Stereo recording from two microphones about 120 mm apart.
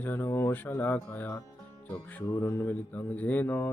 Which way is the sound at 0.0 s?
15° left (ahead or behind).